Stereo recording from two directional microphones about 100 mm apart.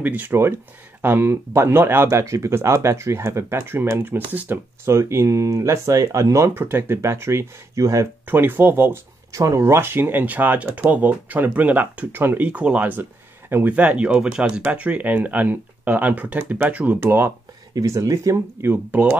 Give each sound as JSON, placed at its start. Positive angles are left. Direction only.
{"t": 0.0, "sound": "speech", "side_deg": -15}
{"t": 4.8, "sound": "speech", "side_deg": -30}
{"t": 8.3, "sound": "speech", "side_deg": -20}
{"t": 17.7, "sound": "speech", "side_deg": -35}